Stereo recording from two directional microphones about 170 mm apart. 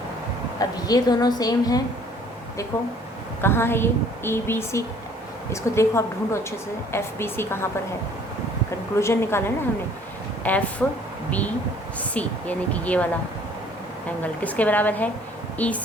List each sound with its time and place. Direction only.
0.6 s a woman's voice: 20° left (ahead or behind)
9.0 s a woman's voice: 15° left (ahead or behind)
10.4 s a woman's voice: 10° left (ahead or behind)
14.4 s a woman's voice: 10° left (ahead or behind)